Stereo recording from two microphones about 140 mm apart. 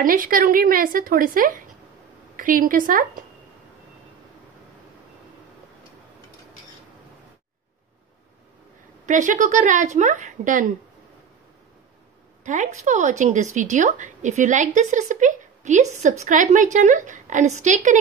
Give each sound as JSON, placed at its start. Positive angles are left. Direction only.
{"t": 0.0, "sound": "a woman's voice", "side_deg": -85}
{"t": 9.0, "sound": "a woman's voice", "side_deg": -65}
{"t": 12.4, "sound": "a woman's voice", "side_deg": -60}